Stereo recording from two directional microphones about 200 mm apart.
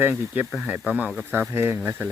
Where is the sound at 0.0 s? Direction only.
10° right (ahead or behind).